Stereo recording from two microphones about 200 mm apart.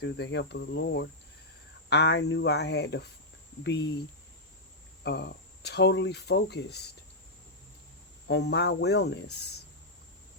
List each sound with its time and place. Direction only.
0.0 s speech: 60° left (ahead or behind)
5.0 s speech: 55° left (ahead or behind)
8.3 s speech: 60° left (ahead or behind)